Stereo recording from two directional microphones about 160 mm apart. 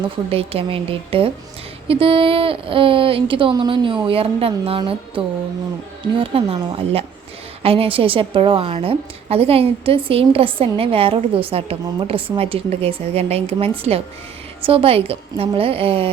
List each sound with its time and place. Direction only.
0.3 s a woman's voice: 35° right (ahead or behind)